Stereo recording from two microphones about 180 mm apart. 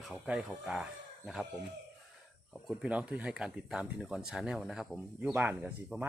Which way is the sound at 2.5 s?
Centre (ahead or behind).